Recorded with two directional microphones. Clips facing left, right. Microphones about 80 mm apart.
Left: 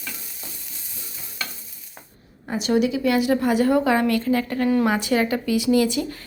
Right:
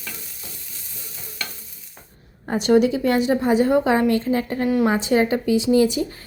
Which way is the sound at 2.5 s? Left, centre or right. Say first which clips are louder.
Right 4 dB; right.